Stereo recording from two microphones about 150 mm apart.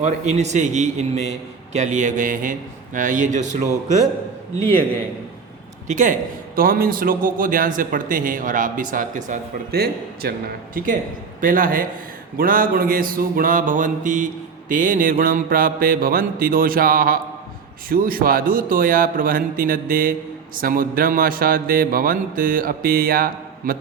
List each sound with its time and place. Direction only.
0.0 s a man's voice: 50° right (ahead or behind)
5.9 s a man's voice: 60° right (ahead or behind)
6.6 s a man's voice: 75° right (ahead or behind); by 10.3 s 90° right
10.8 s speech: 65° right (ahead or behind)